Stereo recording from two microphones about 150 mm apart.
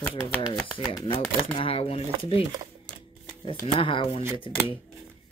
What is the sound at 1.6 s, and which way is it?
Speech, 40° left (ahead or behind).